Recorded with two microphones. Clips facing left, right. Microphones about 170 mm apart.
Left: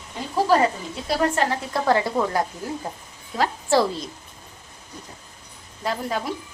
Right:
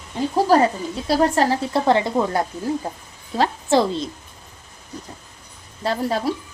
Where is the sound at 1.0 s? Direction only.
35° right (ahead or behind).